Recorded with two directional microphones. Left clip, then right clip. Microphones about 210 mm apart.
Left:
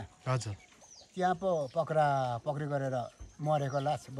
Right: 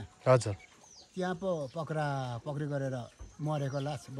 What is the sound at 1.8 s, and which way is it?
Speech, 30° left (ahead or behind).